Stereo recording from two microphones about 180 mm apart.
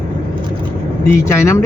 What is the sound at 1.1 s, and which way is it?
Speech, 15° left (ahead or behind).